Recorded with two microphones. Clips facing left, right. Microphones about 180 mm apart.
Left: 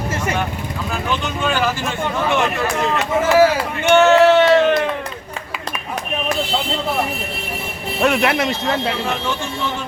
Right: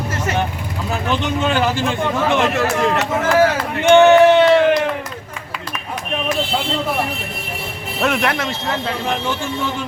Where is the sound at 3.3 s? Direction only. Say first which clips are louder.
Left 2 dB; 10° left (ahead or behind).